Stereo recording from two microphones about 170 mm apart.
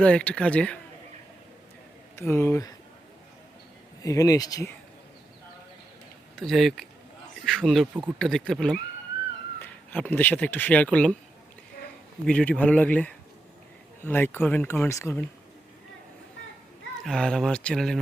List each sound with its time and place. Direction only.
0.0 s speech: 5° left (ahead or behind)
2.1 s speech: 15° left (ahead or behind)
4.0 s speech: 20° left (ahead or behind)
6.4 s speech: centre (ahead or behind)
12.2 s speech: 5° left (ahead or behind)
17.0 s speech: centre (ahead or behind)